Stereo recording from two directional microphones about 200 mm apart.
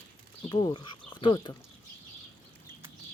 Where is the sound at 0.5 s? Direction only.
20° left (ahead or behind).